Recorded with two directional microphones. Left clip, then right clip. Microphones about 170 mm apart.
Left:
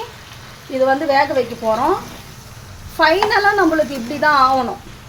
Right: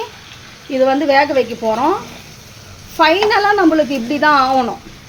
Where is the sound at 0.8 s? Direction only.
55° right (ahead or behind).